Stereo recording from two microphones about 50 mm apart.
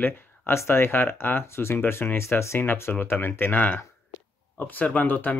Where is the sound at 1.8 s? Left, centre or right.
Left.